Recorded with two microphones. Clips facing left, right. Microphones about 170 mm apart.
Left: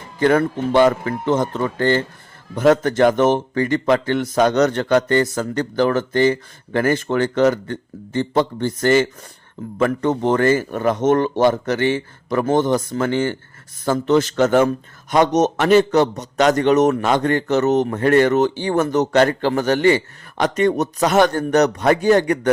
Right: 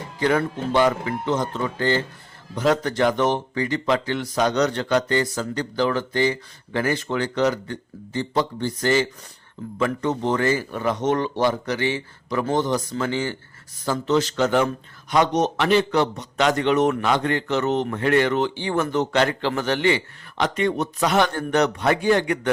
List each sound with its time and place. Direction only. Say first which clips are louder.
0.2 s speech: left 5 dB; 50° left (ahead or behind)